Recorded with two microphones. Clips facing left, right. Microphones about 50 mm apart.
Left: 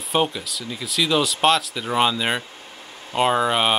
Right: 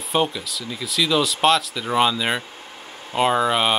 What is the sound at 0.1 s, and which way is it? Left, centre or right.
Speech, centre.